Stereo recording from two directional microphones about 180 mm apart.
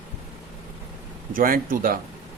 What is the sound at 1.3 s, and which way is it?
Speech, 50° right (ahead or behind).